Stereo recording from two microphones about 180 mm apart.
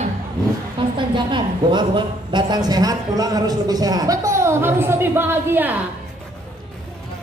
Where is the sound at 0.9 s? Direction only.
25° right (ahead or behind); by 5.8 s 10° right (ahead or behind).